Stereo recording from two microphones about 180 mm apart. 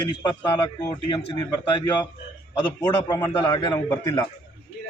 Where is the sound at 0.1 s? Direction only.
25° left (ahead or behind).